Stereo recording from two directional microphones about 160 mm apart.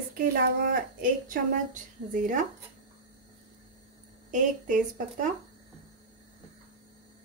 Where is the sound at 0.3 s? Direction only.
65° right (ahead or behind).